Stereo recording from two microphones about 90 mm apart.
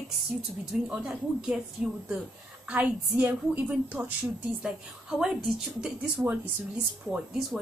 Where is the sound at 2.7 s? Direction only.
15° right (ahead or behind).